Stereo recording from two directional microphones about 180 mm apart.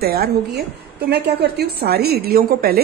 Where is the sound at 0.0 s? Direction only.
60° right (ahead or behind).